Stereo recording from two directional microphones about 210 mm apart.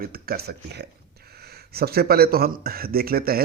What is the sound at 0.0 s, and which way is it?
Speech, 45° right (ahead or behind).